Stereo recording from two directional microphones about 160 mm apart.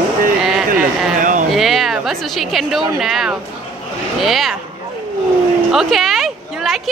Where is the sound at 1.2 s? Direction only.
55° right (ahead or behind).